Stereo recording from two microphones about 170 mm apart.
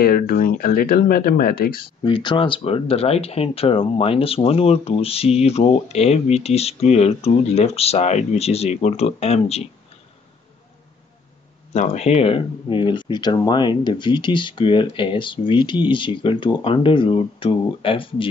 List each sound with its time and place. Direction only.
0.0 s speech: 60° left (ahead or behind)
2.0 s speech: 30° left (ahead or behind)
11.7 s speech: 45° left (ahead or behind)